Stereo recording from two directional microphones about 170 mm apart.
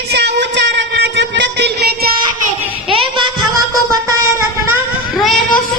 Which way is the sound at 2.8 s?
30° right (ahead or behind).